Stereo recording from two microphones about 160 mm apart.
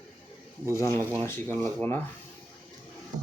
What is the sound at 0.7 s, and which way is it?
Speech, 15° left (ahead or behind).